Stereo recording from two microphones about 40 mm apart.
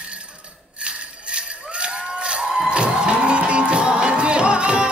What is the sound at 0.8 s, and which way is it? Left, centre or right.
Music, right.